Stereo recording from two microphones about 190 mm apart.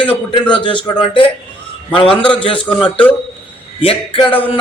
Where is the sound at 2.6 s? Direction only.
5° left (ahead or behind).